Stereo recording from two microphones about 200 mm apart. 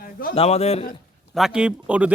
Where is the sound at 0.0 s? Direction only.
45° left (ahead or behind).